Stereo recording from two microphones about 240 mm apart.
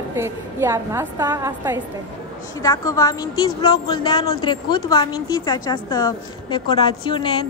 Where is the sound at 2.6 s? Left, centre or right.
Centre.